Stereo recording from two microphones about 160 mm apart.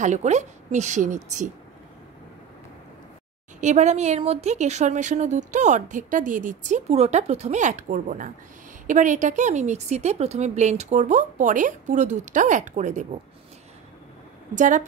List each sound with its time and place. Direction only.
0.0 s a woman's voice: 45° right (ahead or behind)
3.6 s a woman's voice: 45° right (ahead or behind)
14.5 s a woman's voice: 50° right (ahead or behind)